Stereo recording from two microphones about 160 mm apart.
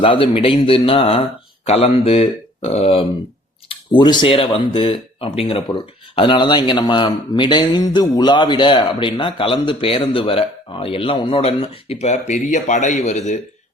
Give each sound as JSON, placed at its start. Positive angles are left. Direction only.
{"t": 0.0, "sound": "speech", "side_deg": 35}
{"t": 3.7, "sound": "speech", "side_deg": 30}